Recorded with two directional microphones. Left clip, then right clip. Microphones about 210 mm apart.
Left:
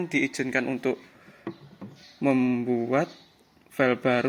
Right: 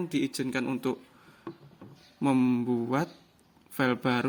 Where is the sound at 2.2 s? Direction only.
45° right (ahead or behind).